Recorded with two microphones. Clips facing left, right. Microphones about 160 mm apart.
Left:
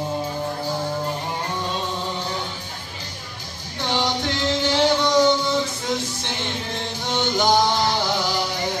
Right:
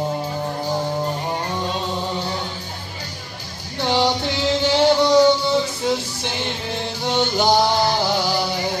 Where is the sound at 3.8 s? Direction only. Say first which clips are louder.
Right 4 dB; 10° right (ahead or behind).